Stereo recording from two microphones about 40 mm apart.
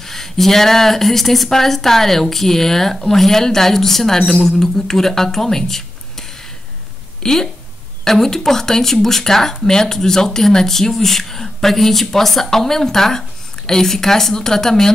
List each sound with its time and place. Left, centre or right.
0.0 s speech: centre
4.2 s a woman's voice: centre
4.5 s speech: centre
7.2 s speech: centre